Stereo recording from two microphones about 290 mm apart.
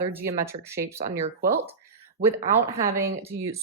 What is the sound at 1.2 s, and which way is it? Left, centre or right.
Speech, right.